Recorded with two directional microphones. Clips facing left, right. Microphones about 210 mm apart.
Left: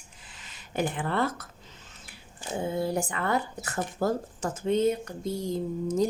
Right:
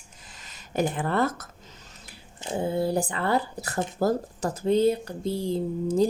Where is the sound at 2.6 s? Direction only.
35° right (ahead or behind).